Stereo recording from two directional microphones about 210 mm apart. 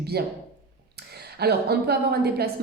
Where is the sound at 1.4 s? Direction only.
50° right (ahead or behind).